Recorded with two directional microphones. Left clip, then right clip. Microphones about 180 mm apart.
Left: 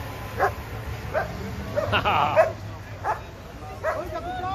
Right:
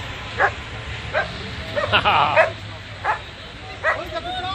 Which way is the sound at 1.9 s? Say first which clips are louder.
Right 6 dB; 30° right (ahead or behind).